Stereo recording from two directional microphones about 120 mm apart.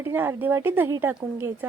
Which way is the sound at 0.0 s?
20° right (ahead or behind).